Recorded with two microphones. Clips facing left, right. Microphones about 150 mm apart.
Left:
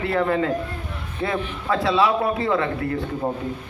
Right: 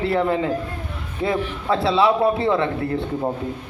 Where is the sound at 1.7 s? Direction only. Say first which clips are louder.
Right 2 dB; 30° right (ahead or behind).